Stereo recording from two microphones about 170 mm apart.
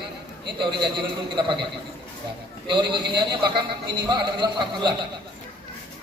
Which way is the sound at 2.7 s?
30° right (ahead or behind).